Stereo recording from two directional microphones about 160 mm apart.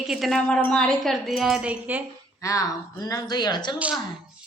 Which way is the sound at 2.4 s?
20° left (ahead or behind).